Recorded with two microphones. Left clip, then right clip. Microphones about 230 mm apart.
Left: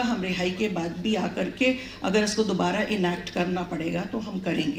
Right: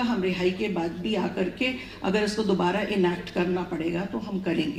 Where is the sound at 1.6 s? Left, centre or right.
Left.